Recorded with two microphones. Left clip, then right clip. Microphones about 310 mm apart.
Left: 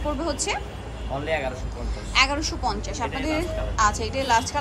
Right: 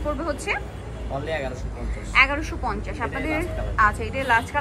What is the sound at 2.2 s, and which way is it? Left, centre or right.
A woman's voice, centre.